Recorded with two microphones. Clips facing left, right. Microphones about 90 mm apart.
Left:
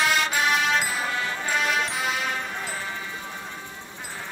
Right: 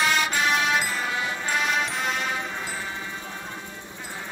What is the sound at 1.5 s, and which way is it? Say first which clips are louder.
Music: even; centre (ahead or behind).